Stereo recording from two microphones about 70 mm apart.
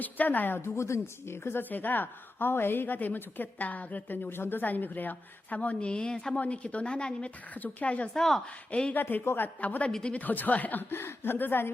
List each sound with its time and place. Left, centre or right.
0.0 s a woman's voice: left
8.1 s a woman's voice: centre
8.7 s speech: centre
9.0 s a woman's voice: left